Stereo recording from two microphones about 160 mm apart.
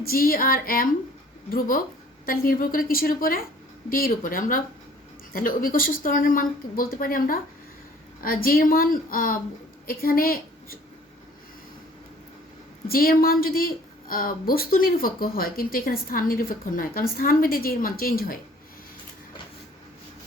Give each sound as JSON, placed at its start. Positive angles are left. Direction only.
{"t": 0.0, "sound": "a woman's voice", "side_deg": 65}
{"t": 12.9, "sound": "speech", "side_deg": 65}